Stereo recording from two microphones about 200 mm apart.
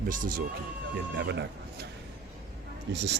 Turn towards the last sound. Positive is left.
turn(degrees=-60)  # may be behind; listen again after turning